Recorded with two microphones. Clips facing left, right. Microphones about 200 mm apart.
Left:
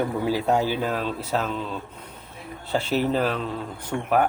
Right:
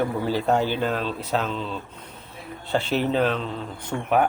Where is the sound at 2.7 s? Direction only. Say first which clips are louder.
Even; 5° left (ahead or behind).